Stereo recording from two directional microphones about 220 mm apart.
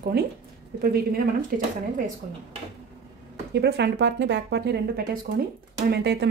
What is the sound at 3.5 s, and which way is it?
Speech, 50° right (ahead or behind).